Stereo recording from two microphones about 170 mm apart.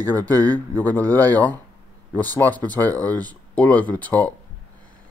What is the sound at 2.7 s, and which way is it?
Speech, 10° left (ahead or behind).